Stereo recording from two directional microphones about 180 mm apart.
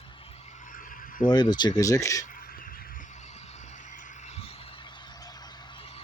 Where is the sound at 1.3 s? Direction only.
25° left (ahead or behind).